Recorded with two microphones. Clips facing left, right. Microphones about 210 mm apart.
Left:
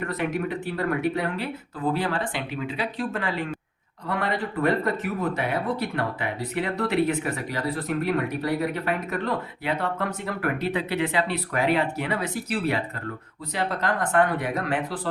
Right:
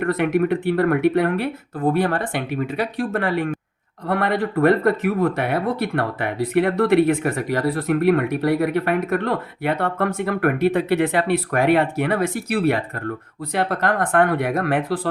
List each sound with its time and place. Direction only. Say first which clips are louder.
0.0 s speech: right 8 dB; 55° right (ahead or behind)